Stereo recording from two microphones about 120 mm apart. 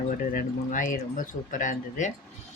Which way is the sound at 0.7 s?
90° left.